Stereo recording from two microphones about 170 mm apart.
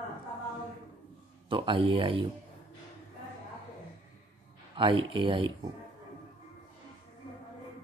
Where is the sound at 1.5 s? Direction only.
30° right (ahead or behind).